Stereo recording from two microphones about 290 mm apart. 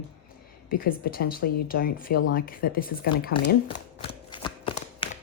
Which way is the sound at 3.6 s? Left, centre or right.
Centre.